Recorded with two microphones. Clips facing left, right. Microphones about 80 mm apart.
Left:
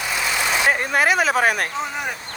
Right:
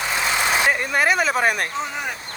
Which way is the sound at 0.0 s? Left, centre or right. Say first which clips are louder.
Right 1 dB; right.